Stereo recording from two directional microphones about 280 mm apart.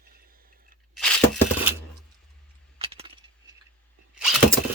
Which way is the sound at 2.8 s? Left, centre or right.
Centre.